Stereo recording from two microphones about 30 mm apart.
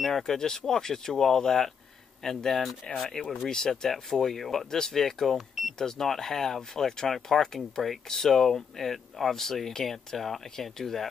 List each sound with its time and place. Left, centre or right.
0.1 s speech: centre
3.0 s speech: left; by 4.6 s centre
4.6 s speech: centre